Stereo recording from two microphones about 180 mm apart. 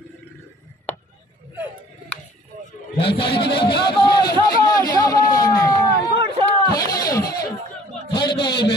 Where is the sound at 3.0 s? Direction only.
30° left (ahead or behind).